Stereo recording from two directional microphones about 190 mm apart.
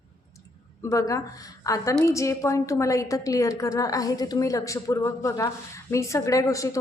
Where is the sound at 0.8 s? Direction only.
15° left (ahead or behind).